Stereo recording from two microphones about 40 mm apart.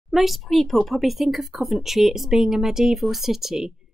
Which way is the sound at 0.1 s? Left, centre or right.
Centre.